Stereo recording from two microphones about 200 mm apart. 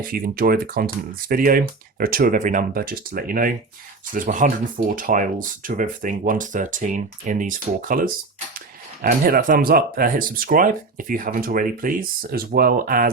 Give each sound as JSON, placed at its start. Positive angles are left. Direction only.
{"t": 0.1, "sound": "speech", "side_deg": -45}